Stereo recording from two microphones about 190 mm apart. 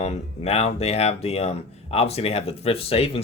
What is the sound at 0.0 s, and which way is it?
Speech, 35° left (ahead or behind).